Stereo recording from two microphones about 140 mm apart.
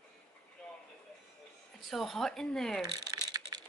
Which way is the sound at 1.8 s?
Centre (ahead or behind).